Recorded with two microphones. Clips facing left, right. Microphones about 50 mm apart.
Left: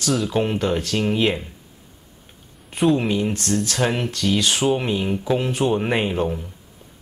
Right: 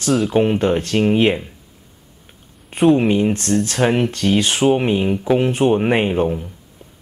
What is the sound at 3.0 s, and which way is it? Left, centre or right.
Speech, right.